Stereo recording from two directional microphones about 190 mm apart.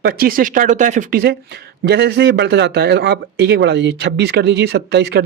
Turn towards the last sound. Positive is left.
turn(degrees=-60)  # may be behind; listen again after turning